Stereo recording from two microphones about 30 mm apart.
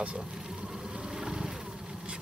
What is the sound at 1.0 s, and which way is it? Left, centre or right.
Vehicle, centre.